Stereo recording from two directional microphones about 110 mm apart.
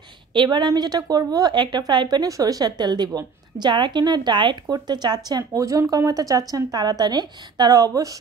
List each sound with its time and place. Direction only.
0.3 s a woman's voice: 45° right (ahead or behind)